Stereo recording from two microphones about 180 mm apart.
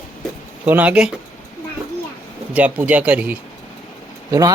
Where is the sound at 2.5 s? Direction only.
10° right (ahead or behind).